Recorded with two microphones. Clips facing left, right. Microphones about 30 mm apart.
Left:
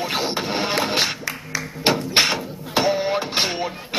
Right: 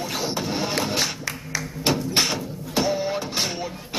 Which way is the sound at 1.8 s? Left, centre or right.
Left.